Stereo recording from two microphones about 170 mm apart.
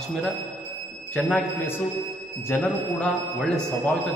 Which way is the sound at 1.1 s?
5° left (ahead or behind).